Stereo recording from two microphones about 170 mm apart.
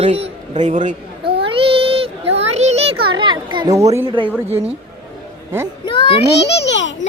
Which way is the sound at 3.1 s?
25° right (ahead or behind).